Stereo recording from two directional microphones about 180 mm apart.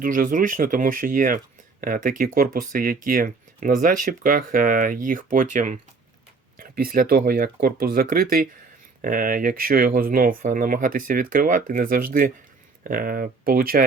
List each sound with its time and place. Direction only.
0.0 s speech: 50° right (ahead or behind)